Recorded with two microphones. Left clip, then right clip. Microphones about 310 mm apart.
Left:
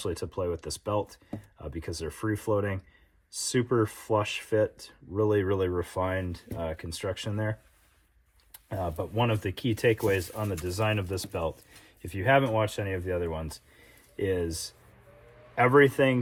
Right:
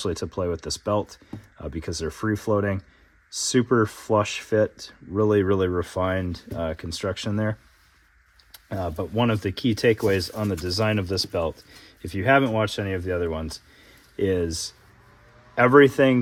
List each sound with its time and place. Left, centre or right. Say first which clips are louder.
0.0 s speech: right 5 dB; right
8.5 s speech: right 3 dB; right